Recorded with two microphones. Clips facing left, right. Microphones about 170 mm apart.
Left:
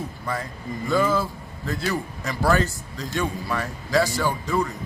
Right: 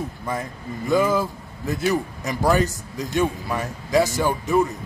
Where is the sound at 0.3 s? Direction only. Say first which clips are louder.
Even; 20° right (ahead or behind).